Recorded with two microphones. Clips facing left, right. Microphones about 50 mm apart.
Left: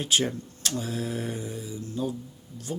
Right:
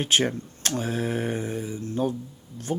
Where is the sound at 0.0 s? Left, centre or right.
Right.